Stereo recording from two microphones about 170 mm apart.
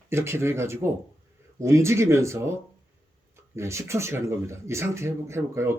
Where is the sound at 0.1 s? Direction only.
15° right (ahead or behind).